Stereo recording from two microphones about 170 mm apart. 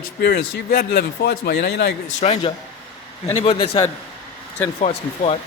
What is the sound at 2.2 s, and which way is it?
A man's voice, 40° left (ahead or behind).